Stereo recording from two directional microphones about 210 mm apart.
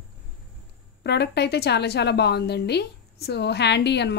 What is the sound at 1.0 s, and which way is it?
A woman's voice, 55° left (ahead or behind).